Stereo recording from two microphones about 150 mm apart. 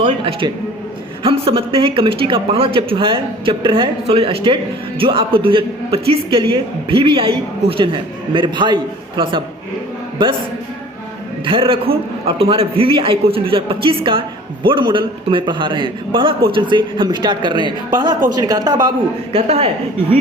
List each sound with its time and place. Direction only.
0.0 s a man's voice: 35° right (ahead or behind)
11.4 s a man's voice: 35° right (ahead or behind)
19.3 s a man's voice: 40° right (ahead or behind)